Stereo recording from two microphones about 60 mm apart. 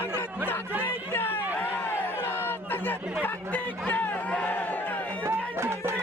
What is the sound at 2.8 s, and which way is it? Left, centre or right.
Speech, left.